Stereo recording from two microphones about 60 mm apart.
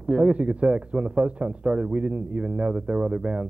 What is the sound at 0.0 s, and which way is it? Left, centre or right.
Speech, centre.